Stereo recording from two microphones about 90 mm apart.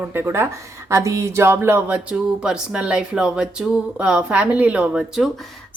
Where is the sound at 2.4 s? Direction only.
10° right (ahead or behind).